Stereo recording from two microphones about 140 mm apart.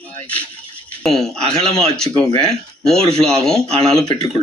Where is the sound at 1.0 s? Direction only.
Centre (ahead or behind).